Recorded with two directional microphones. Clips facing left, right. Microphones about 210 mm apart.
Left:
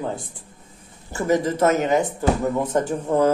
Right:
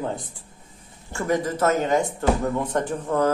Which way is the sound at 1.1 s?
10° left (ahead or behind).